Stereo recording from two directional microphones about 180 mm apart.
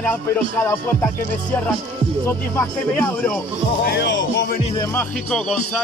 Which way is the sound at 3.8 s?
70° left (ahead or behind).